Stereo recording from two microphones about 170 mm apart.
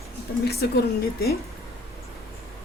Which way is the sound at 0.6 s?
70° left (ahead or behind).